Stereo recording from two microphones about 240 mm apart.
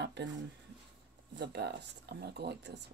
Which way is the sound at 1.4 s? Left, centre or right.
Right.